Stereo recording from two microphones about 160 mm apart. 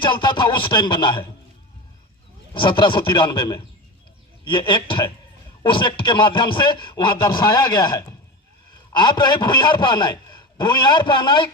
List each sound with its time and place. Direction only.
0.0 s a man's voice: 30° left (ahead or behind)
2.5 s a man's voice: 30° left (ahead or behind)